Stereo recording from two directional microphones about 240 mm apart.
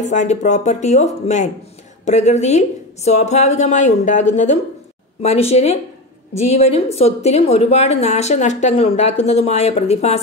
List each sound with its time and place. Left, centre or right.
0.1 s a woman's voice: left